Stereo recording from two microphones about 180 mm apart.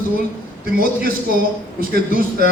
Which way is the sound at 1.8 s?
55° right (ahead or behind).